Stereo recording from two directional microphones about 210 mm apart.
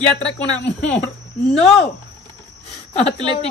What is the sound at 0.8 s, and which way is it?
Speech, 5° left (ahead or behind).